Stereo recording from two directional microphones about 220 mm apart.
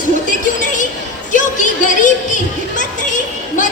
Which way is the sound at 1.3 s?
35° left (ahead or behind).